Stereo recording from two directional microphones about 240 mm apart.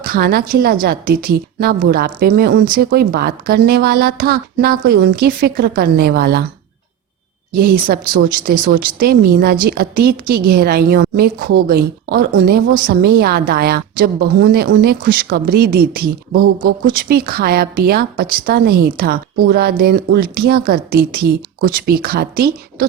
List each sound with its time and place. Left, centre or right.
0.0 s a woman's voice: right
7.6 s a woman's voice: right